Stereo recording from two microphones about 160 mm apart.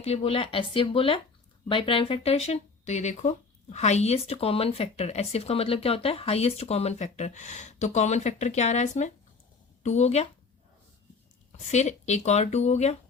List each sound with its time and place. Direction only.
0.0 s speech: 40° left (ahead or behind)
11.5 s speech: 45° left (ahead or behind)